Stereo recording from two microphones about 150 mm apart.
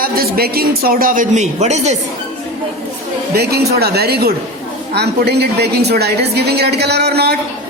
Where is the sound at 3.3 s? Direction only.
90° right.